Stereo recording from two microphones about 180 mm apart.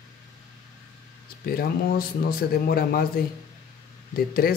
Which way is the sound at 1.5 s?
55° left (ahead or behind).